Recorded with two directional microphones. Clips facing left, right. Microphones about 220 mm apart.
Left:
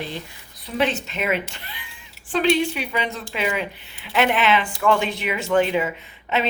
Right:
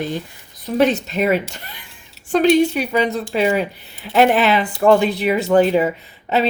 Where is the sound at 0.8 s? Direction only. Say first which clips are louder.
Right 7 dB; 40° right (ahead or behind).